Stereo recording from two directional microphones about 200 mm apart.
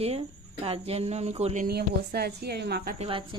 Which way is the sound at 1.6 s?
55° right (ahead or behind).